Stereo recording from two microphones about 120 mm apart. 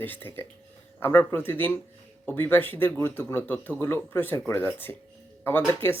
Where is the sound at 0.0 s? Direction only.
15° left (ahead or behind).